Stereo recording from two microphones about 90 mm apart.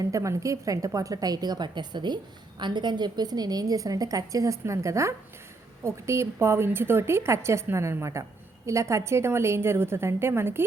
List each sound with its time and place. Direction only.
0.0 s a woman's voice: 35° right (ahead or behind)